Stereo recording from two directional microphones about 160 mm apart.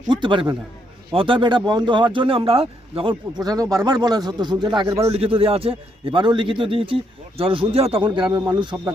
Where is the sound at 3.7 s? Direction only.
25° right (ahead or behind).